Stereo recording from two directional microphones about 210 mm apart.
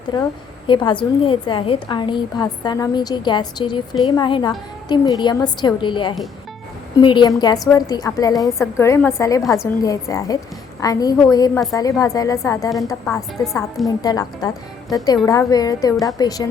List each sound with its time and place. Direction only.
0.1 s a woman's voice: 20° left (ahead or behind)